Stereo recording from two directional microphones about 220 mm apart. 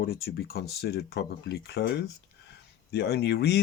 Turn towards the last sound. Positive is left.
turn(degrees=50)  # may be behind; listen again after turning